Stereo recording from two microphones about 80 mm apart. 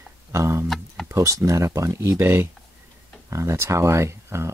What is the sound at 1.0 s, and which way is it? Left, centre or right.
Speech, right.